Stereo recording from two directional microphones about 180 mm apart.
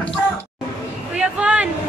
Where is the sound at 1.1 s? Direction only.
5° right (ahead or behind).